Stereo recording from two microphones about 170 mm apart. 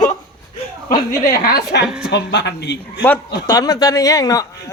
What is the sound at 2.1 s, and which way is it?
Speech, 90° left.